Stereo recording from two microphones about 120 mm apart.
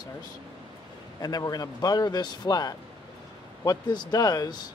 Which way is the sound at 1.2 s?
30° left (ahead or behind).